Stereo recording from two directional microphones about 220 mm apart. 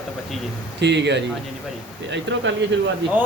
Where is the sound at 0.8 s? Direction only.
50° right (ahead or behind).